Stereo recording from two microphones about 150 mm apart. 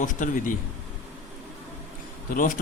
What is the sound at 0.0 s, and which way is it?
Speech, 60° left (ahead or behind).